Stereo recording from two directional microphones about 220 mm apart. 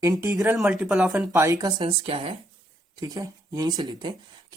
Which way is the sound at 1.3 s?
15° right (ahead or behind).